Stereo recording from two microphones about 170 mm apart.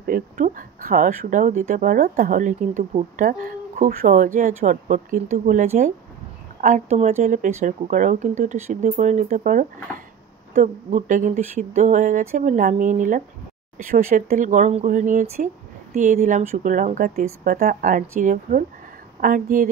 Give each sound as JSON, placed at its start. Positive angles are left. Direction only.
{"t": 0.0, "sound": "speech", "side_deg": -55}